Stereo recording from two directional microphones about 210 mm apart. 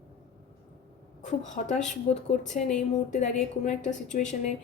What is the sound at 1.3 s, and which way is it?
A woman's voice, 35° left (ahead or behind).